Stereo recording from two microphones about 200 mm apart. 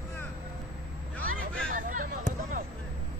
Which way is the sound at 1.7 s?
40° right (ahead or behind).